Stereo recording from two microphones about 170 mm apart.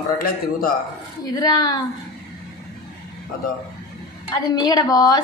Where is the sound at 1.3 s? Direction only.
20° left (ahead or behind).